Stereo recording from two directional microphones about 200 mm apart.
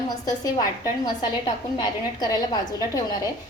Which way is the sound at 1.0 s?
20° left (ahead or behind).